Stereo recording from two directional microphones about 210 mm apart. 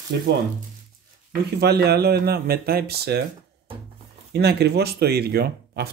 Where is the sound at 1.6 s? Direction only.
50° right (ahead or behind).